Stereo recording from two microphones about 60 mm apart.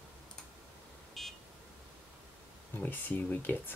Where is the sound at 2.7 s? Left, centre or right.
Left.